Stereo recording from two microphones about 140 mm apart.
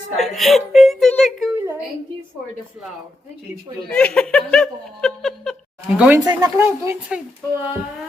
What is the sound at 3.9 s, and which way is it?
Giggle, 5° left (ahead or behind).